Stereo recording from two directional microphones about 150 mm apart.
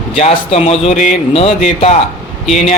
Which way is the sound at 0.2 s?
45° left (ahead or behind).